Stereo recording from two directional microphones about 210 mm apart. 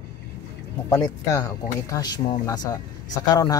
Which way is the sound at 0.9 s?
15° left (ahead or behind).